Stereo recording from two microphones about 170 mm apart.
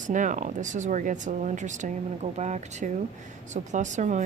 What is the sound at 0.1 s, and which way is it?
Speech, 50° right (ahead or behind).